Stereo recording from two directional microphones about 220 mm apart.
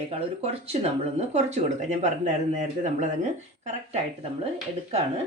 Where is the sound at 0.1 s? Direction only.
30° right (ahead or behind).